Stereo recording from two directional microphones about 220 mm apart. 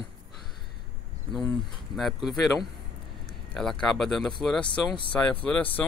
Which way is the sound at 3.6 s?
Centre (ahead or behind).